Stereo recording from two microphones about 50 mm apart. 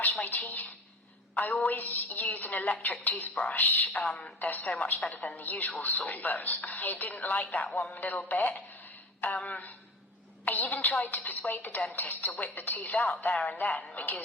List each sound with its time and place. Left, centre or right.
0.3 s speech: left